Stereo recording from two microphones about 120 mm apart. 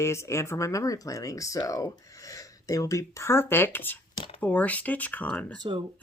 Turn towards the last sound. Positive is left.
turn(degrees=-35)  # may be behind; listen again after turning